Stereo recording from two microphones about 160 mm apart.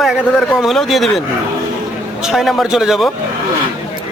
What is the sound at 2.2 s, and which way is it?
Speech, centre (ahead or behind).